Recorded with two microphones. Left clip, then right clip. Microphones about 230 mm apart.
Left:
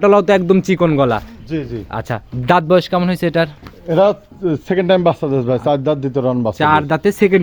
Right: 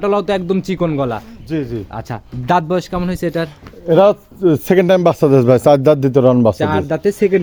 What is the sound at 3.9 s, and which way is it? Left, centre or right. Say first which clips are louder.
A man's voice: right 3 dB; right.